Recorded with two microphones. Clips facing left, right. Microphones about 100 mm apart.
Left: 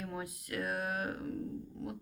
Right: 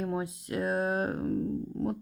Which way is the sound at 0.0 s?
25° right (ahead or behind).